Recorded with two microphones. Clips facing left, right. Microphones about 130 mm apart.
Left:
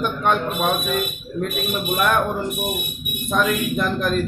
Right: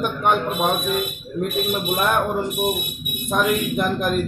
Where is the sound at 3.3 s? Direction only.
15° right (ahead or behind).